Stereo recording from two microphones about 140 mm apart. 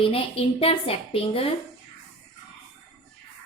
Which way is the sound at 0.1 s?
45° left (ahead or behind).